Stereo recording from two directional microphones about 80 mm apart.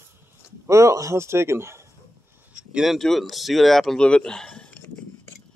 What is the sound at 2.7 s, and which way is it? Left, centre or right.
Speech, centre.